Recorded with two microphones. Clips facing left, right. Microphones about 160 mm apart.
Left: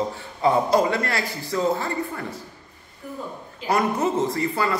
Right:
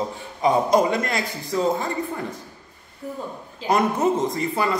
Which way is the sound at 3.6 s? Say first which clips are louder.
Right 2 dB; 20° right (ahead or behind).